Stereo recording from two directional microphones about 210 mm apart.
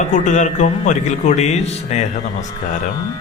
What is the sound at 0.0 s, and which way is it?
Speech, 35° left (ahead or behind).